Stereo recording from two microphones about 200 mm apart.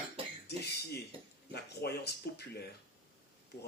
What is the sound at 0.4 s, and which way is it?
Cough, 55° left (ahead or behind).